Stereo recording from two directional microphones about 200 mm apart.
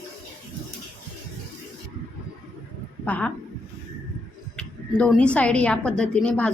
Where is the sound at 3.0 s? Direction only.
5° left (ahead or behind).